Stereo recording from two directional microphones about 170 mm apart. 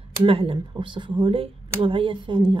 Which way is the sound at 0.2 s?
35° right (ahead or behind).